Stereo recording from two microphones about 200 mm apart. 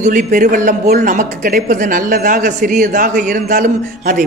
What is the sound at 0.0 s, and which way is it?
A man's voice, 40° right (ahead or behind).